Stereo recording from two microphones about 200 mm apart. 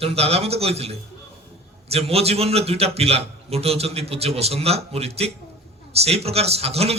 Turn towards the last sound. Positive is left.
turn(degrees=-30)  # may be behind; listen again after turning